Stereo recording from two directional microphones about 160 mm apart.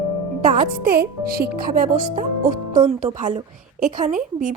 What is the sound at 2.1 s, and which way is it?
Music, 50° right (ahead or behind).